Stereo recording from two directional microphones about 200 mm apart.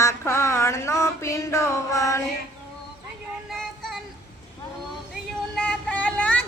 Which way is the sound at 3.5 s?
Centre (ahead or behind).